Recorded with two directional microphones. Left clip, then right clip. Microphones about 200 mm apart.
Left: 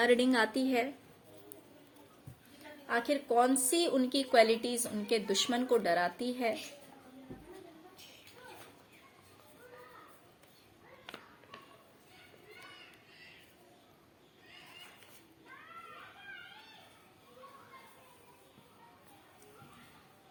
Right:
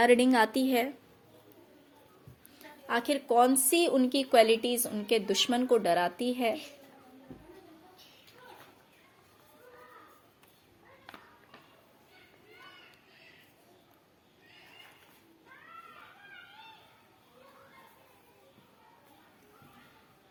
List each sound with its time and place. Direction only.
0.0 s a woman's voice: 35° right (ahead or behind)
2.8 s a woman's voice: 45° right (ahead or behind)